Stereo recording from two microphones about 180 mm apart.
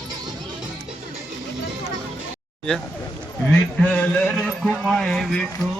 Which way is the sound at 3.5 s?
5° left (ahead or behind).